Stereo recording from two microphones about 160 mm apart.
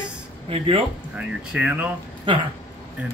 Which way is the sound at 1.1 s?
10° right (ahead or behind).